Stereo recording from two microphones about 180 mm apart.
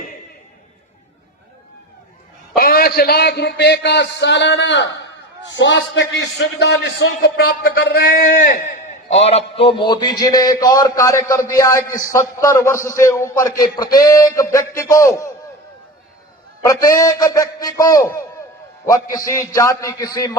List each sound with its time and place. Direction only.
2.6 s a man's voice: 55° left (ahead or behind); by 15.3 s 15° left (ahead or behind)
16.6 s a man's voice: 20° left (ahead or behind)